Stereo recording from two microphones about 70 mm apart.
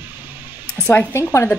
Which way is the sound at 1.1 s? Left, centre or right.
Left.